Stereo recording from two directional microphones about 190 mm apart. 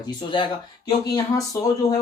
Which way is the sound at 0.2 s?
25° left (ahead or behind).